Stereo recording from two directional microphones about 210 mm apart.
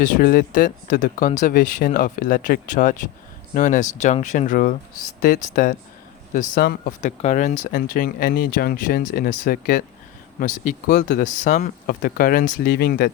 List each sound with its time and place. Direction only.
0.0 s speech: 45° left (ahead or behind)